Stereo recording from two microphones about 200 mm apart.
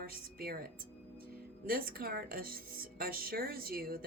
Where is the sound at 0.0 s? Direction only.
45° right (ahead or behind).